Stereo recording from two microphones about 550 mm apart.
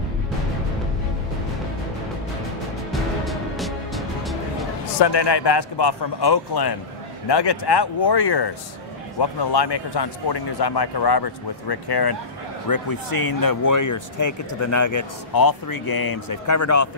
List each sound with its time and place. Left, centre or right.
2.9 s music: centre
4.9 s speech: left